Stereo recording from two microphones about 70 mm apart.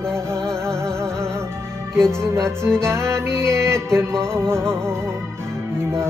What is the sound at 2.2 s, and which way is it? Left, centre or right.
Music, right.